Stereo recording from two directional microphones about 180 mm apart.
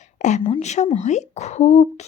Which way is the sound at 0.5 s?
40° left (ahead or behind).